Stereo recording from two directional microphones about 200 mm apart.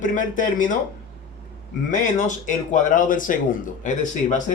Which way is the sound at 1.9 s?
40° left (ahead or behind).